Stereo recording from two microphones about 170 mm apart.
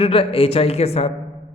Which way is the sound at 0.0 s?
35° left (ahead or behind).